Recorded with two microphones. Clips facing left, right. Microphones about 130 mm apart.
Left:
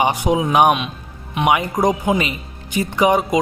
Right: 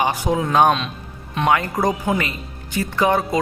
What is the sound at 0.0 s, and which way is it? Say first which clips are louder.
Speech: left 3 dB; 20° left (ahead or behind).